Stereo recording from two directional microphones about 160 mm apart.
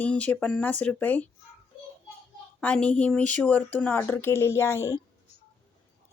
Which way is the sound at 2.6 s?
5° left (ahead or behind).